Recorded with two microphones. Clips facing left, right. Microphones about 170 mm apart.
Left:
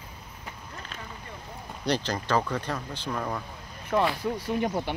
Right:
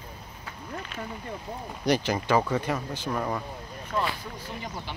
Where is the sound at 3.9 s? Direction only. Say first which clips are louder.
Left 5 dB; 65° left (ahead or behind).